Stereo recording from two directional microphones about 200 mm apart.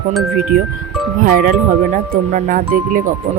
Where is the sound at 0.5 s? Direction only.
45° right (ahead or behind).